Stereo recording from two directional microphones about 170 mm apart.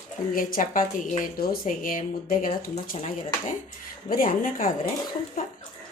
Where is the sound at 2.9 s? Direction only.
40° left (ahead or behind).